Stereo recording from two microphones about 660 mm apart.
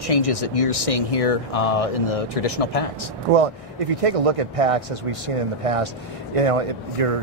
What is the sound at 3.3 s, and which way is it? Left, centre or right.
A man's voice, right.